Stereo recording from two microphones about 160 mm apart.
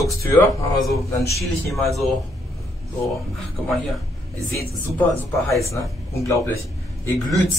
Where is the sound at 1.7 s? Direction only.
Centre (ahead or behind).